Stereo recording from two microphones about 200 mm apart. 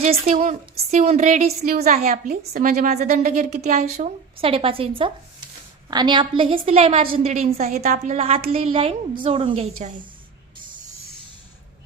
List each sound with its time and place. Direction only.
0.0 s a woman's voice: 30° right (ahead or behind)
1.6 s a woman's voice: 50° right (ahead or behind); by 9.6 s 30° right (ahead or behind)